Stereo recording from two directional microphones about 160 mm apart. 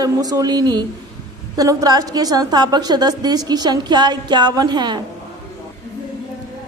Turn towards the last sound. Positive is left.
turn(degrees=-25)  # may be behind; listen again after turning